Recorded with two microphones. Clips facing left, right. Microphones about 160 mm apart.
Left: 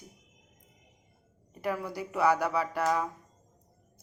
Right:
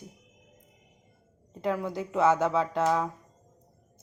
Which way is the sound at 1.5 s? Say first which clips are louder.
Right 3 dB; 20° right (ahead or behind).